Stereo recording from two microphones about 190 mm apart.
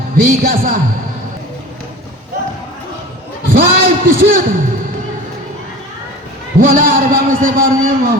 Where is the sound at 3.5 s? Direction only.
50° right (ahead or behind).